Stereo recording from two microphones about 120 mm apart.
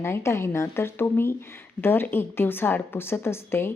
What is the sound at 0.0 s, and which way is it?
A woman's voice, 20° left (ahead or behind).